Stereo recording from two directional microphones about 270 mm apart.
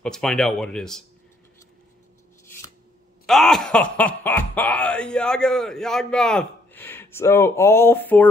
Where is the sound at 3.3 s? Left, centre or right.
Centre.